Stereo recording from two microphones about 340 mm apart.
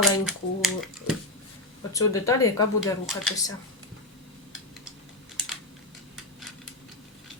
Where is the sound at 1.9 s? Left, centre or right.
Centre.